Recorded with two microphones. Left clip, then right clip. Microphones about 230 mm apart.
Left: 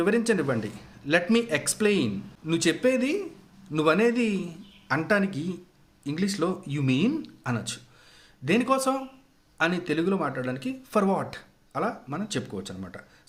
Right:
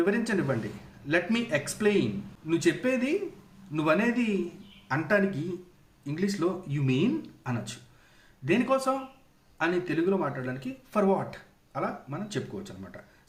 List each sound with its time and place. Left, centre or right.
0.0 s speech: left